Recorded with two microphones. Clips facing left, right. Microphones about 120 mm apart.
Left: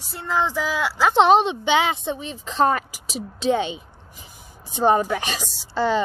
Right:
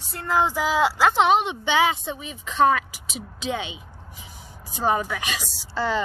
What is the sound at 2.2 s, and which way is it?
Speech, 30° left (ahead or behind).